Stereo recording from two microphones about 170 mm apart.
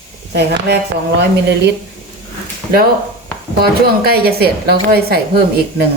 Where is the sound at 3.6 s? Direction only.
65° right (ahead or behind).